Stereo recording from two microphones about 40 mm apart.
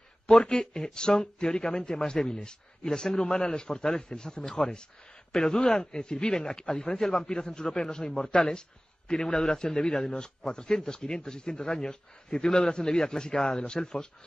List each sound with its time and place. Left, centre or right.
0.3 s a man's voice: left